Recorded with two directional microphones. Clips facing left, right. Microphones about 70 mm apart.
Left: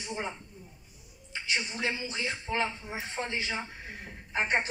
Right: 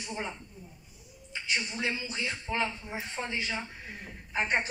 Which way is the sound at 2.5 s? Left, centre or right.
Centre.